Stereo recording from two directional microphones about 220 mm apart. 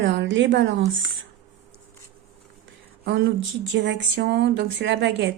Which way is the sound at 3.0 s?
50° right (ahead or behind).